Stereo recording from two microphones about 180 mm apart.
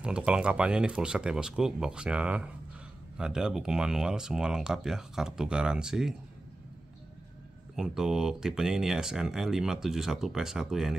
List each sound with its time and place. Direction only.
0.0 s speech: 5° right (ahead or behind)
7.7 s speech: 5° right (ahead or behind)